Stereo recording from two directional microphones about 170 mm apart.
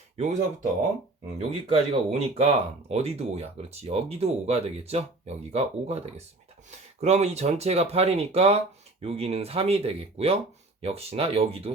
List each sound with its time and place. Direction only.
0.2 s speech: 45° right (ahead or behind)